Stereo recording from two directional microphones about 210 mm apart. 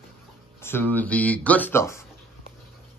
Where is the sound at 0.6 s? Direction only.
10° left (ahead or behind).